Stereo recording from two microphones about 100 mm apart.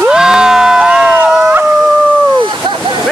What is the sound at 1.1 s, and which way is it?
Howl, 20° right (ahead or behind).